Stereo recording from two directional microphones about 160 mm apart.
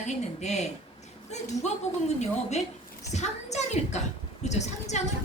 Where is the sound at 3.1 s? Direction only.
45° left (ahead or behind).